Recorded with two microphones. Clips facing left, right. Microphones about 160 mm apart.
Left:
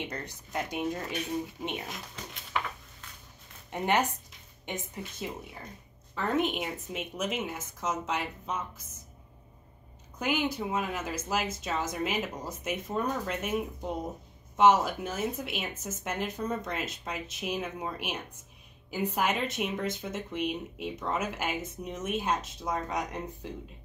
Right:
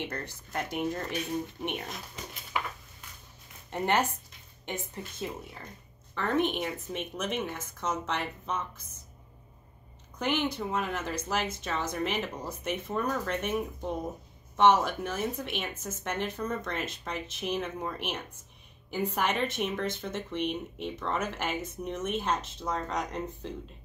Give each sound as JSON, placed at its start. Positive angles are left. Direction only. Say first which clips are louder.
{"t": 0.0, "sound": "speech", "louder": "right 1 dB", "side_deg": 15}
{"t": 1.9, "sound": "a sound", "louder": "even", "side_deg": 0}
{"t": 3.7, "sound": "speech", "louder": "even", "side_deg": 15}
{"t": 10.1, "sound": "speech", "louder": "even", "side_deg": 10}
{"t": 13.4, "sound": "speech", "louder": "even", "side_deg": 10}